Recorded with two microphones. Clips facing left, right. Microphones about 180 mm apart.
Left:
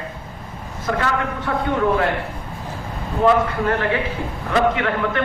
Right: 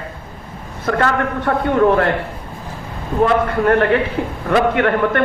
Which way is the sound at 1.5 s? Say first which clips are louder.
Right 5 dB; 50° right (ahead or behind).